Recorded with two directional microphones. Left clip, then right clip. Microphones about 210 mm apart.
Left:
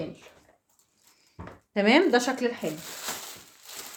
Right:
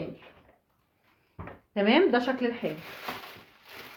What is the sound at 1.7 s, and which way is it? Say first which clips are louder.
Speech: left 2 dB; 45° left (ahead or behind).